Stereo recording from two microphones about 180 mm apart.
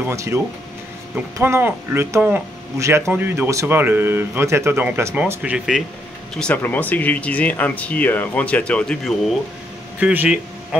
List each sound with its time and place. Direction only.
0.0 s speech: 15° right (ahead or behind)
6.3 s speech: 5° left (ahead or behind)
9.9 s speech: 10° right (ahead or behind)